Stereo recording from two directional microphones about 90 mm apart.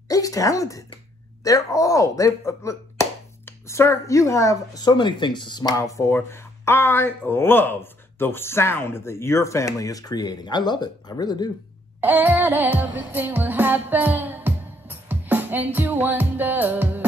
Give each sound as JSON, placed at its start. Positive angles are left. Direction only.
{"t": 0.1, "sound": "speech", "side_deg": 40}
{"t": 4.8, "sound": "speech", "side_deg": 60}
{"t": 12.0, "sound": "music", "side_deg": -20}